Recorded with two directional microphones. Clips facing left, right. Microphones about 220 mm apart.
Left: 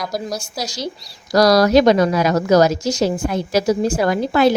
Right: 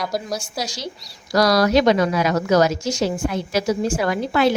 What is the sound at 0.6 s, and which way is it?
A woman's voice, 40° left (ahead or behind).